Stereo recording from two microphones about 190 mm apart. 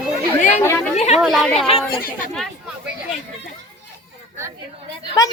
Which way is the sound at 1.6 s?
30° left (ahead or behind).